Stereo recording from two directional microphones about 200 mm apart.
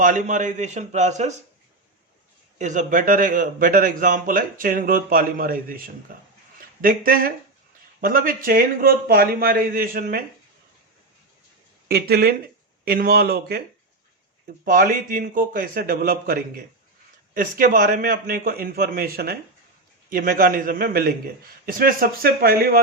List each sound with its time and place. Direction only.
0.0 s a man's voice: 40° right (ahead or behind)
2.6 s a man's voice: 40° right (ahead or behind)
11.9 s a man's voice: 50° right (ahead or behind)
14.6 s a man's voice: 45° right (ahead or behind)